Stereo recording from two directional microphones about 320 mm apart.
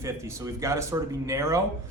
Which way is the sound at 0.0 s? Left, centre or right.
Centre.